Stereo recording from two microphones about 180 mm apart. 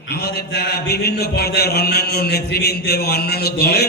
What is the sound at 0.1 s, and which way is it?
A man's voice, 60° left (ahead or behind).